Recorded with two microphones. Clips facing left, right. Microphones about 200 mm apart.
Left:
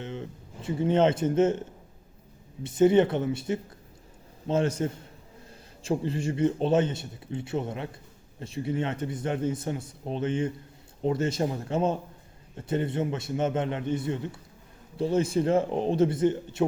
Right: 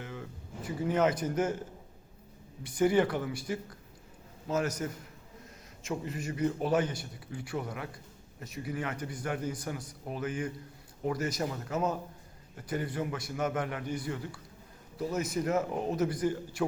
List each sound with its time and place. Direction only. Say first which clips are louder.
0.0 s speech: left 6 dB; 25° left (ahead or behind)
2.6 s a man's voice: left 6 dB; 25° left (ahead or behind)